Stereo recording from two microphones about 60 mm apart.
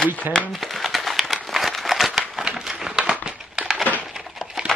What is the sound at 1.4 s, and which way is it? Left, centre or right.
Crumpling, centre.